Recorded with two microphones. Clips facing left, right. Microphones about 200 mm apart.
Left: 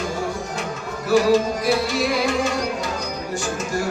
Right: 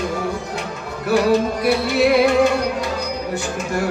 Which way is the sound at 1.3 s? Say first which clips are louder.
Right 1 dB; 60° right (ahead or behind).